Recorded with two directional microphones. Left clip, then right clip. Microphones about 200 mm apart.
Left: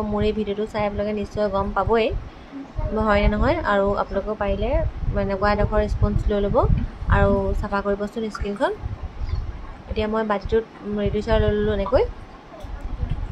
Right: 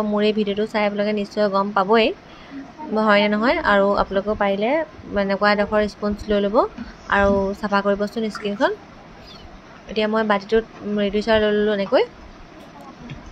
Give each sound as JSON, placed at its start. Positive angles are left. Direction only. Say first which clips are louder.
{"t": 0.1, "sound": "a woman's voice", "louder": "right 3 dB", "side_deg": -15}
{"t": 9.9, "sound": "a woman's voice", "louder": "right 4 dB", "side_deg": -15}